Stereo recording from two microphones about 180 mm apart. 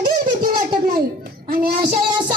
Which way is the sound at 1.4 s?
55° right (ahead or behind).